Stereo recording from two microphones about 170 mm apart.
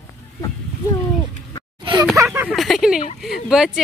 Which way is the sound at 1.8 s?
30° right (ahead or behind).